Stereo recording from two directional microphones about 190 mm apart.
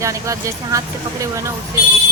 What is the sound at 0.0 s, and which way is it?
Speech, 15° right (ahead or behind).